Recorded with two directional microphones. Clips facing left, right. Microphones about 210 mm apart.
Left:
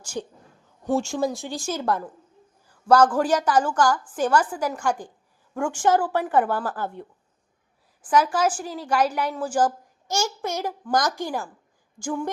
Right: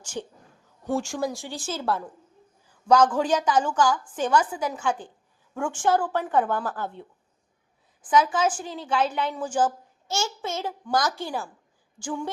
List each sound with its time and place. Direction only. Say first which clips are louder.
0.0 s speech: left 2 dB; 10° left (ahead or behind)
0.9 s a woman's voice: left 3 dB; 25° left (ahead or behind)
8.0 s a woman's voice: left 1 dB; 10° left (ahead or behind)